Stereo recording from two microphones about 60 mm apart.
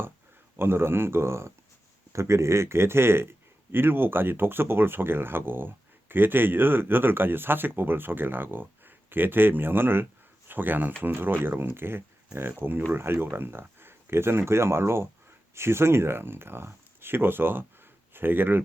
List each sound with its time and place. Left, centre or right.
0.5 s a man's voice: right